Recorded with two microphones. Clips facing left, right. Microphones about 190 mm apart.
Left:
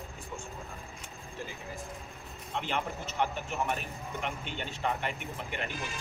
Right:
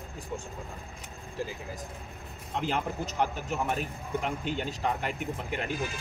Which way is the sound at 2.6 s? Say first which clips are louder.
Right 5 dB; 40° right (ahead or behind).